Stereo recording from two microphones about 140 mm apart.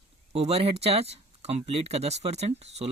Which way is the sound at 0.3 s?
45° right (ahead or behind).